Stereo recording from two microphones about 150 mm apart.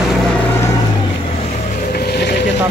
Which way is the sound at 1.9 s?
90° left.